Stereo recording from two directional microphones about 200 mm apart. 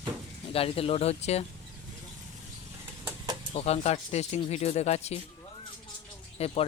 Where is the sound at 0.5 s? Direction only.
30° left (ahead or behind).